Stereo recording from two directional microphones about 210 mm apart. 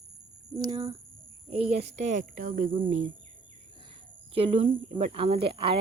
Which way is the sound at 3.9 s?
25° right (ahead or behind).